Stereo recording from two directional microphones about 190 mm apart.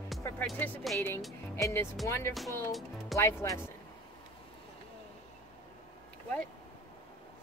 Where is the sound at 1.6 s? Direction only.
15° left (ahead or behind).